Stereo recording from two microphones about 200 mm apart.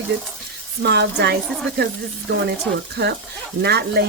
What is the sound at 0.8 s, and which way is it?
Speech, 55° right (ahead or behind).